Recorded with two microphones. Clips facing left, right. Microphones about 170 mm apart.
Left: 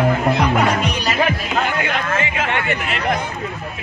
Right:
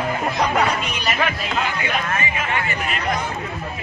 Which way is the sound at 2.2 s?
80° left.